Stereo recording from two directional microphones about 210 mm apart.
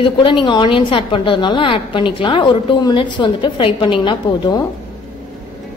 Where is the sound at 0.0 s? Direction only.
25° left (ahead or behind).